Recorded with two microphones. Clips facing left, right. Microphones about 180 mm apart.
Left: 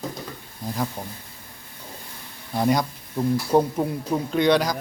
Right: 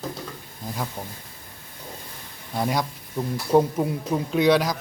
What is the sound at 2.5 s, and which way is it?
Speech, centre (ahead or behind).